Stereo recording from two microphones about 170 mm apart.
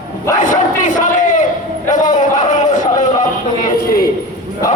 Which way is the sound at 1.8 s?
45° left (ahead or behind).